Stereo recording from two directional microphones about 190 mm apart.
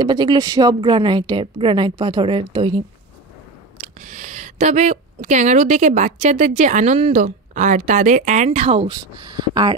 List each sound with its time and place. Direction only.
0.0 s a woman's voice: 20° right (ahead or behind)
3.8 s speech: 40° right (ahead or behind); by 9.8 s 20° right (ahead or behind)